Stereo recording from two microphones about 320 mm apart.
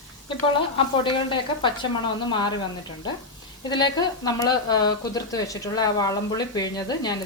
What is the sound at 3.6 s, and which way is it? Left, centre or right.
Speech, centre.